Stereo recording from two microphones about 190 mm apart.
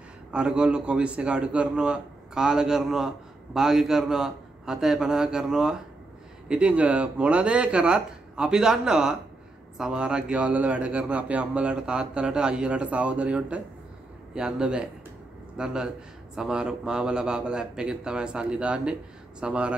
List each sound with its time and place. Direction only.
0.3 s a man's voice: 5° right (ahead or behind)